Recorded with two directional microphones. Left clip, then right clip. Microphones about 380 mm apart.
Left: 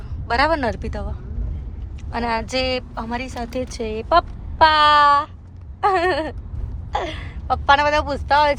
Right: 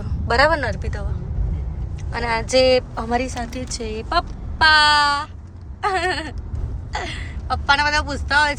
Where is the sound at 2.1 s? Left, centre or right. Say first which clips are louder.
Right 4 dB; centre.